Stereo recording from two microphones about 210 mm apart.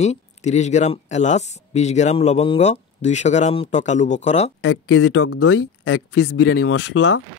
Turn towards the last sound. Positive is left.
turn(degrees=55)  # may be behind; listen again after turning